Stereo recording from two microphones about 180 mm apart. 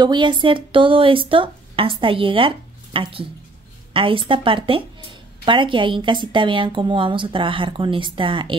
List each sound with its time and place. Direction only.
0.0 s speech: 25° right (ahead or behind)